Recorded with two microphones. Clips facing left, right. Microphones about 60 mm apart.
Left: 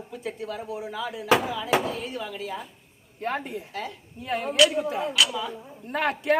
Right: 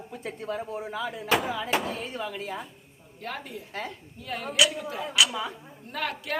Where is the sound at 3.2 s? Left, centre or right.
Left.